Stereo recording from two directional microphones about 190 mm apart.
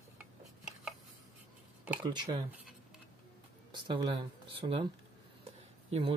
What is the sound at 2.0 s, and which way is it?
Speech, 25° right (ahead or behind).